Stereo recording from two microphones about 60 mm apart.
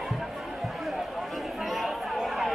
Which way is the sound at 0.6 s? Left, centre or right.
Centre.